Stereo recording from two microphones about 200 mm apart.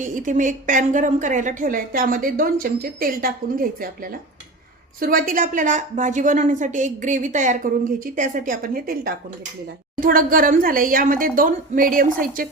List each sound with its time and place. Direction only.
0.0 s a woman's voice: 40° right (ahead or behind)